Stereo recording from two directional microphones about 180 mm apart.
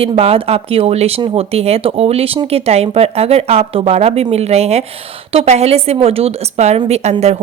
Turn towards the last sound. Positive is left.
turn(degrees=-35)  # may be behind; listen again after turning